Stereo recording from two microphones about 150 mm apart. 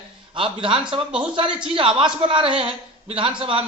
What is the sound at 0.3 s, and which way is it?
A man's voice, 35° right (ahead or behind).